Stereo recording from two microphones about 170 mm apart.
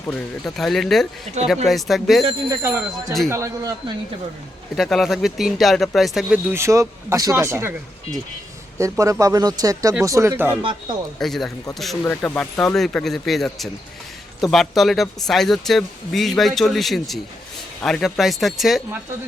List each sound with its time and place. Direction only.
0.1 s speech: centre (ahead or behind)
2.5 s speech: 15° right (ahead or behind)
4.8 s speech: centre (ahead or behind)
6.5 s speech: 15° right (ahead or behind)
8.8 s speech: 20° right (ahead or behind)
11.2 s speech: centre (ahead or behind)